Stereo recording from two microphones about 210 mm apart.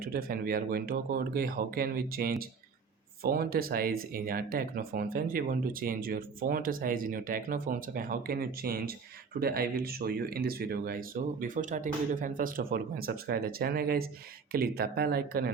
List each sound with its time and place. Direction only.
0.0 s speech: 45° right (ahead or behind)